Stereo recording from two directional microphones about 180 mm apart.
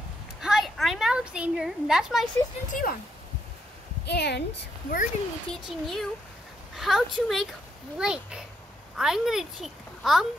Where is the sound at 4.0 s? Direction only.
65° left (ahead or behind).